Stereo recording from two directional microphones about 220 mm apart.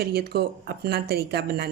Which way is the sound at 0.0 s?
45° right (ahead or behind).